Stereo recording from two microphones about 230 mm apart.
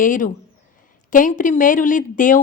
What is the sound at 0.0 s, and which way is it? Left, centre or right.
Speech, left.